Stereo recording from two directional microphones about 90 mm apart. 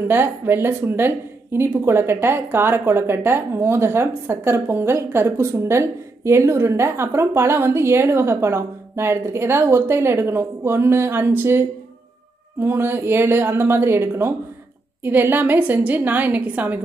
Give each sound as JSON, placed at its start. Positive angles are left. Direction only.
{"t": 0.1, "sound": "speech", "side_deg": -25}